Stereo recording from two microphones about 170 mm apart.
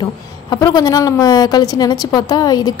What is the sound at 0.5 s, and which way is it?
A woman's voice, 25° left (ahead or behind).